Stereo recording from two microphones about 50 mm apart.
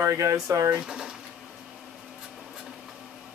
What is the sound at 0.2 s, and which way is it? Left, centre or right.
Speech, right.